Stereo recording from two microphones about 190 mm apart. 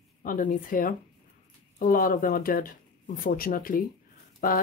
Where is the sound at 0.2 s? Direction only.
45° left (ahead or behind).